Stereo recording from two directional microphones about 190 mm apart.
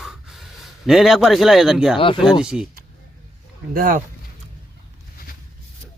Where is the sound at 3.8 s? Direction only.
50° right (ahead or behind).